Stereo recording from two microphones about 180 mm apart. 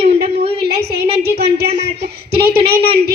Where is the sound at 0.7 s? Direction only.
65° right (ahead or behind).